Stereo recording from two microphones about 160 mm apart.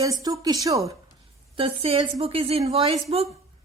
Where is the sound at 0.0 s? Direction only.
25° right (ahead or behind).